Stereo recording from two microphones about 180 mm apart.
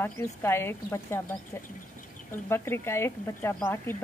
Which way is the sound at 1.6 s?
45° left (ahead or behind).